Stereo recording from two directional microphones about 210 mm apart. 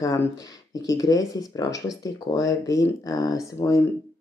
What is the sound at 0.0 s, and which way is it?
Speech, 15° left (ahead or behind).